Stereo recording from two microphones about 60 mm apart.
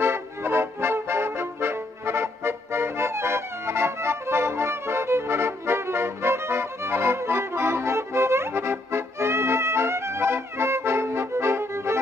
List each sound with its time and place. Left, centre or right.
0.0 s music: right